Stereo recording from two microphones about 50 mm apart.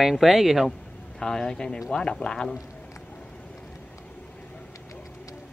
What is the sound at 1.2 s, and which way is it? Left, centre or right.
Speech, centre.